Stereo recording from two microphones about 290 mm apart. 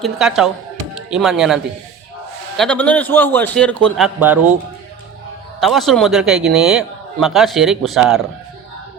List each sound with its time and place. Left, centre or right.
0.0 s a man's voice: centre
5.5 s a man's voice: centre